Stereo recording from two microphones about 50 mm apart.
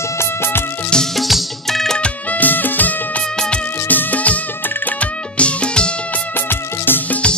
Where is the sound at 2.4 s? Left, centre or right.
Left.